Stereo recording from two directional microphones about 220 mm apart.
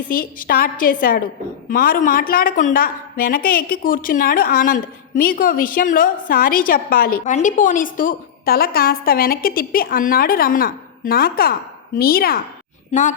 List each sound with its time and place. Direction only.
0.1 s a woman's voice: 40° left (ahead or behind)